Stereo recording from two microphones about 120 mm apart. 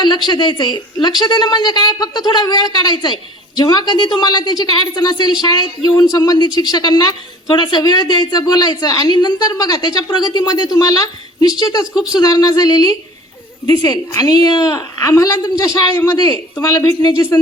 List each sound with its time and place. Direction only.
0.3 s a woman's voice: 35° left (ahead or behind)